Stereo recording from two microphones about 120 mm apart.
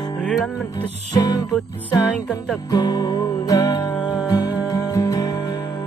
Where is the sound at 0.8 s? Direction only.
35° left (ahead or behind).